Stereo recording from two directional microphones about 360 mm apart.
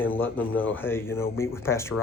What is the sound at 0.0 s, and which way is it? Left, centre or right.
Speech, centre.